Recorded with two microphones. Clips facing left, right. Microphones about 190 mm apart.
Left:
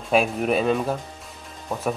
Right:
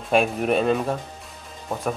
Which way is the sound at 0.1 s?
Centre (ahead or behind).